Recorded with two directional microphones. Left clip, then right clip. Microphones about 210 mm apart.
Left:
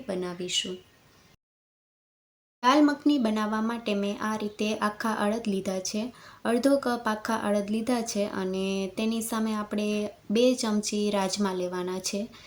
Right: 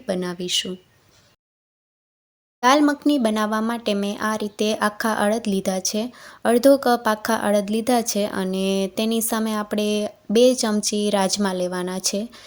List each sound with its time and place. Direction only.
0.0 s speech: 45° right (ahead or behind)
2.6 s speech: 40° right (ahead or behind)